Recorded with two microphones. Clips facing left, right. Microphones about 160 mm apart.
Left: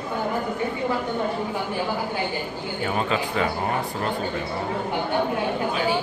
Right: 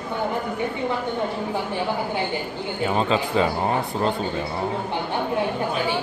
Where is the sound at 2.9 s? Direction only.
25° right (ahead or behind).